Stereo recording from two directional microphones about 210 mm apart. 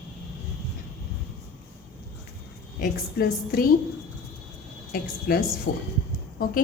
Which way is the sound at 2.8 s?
45° left (ahead or behind).